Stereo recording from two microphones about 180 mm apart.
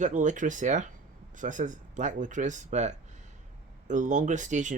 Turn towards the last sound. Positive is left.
turn(degrees=-45)  # may be behind; listen again after turning